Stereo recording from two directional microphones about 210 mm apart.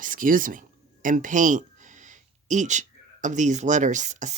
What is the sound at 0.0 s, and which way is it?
Speech, 40° right (ahead or behind).